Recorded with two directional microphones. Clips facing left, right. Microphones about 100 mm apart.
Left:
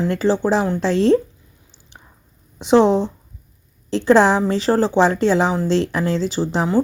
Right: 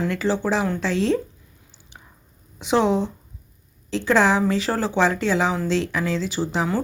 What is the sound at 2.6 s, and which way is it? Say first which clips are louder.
A woman's voice: left 6 dB; 30° left (ahead or behind).